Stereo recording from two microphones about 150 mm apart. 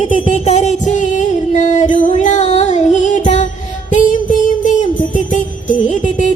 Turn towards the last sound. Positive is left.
turn(degrees=55)  # may be behind; listen again after turning